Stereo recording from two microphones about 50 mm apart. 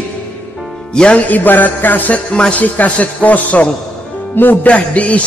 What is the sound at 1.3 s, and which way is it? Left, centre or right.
Speech, left.